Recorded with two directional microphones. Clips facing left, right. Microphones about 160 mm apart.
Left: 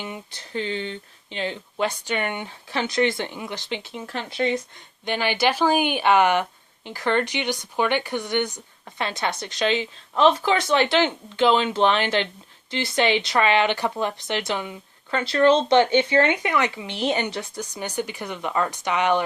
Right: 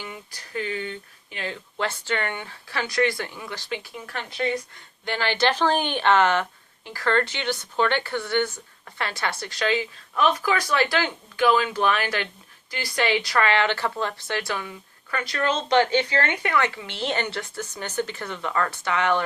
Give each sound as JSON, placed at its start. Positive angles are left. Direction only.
{"t": 0.0, "sound": "speech", "side_deg": 25}